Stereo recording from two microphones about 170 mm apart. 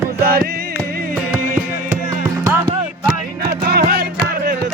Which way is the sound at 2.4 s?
15° right (ahead or behind).